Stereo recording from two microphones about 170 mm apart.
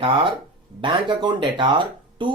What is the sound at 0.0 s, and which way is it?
Speech, 30° right (ahead or behind).